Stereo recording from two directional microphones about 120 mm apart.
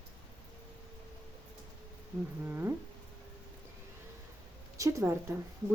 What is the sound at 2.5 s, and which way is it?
Speech, 20° right (ahead or behind).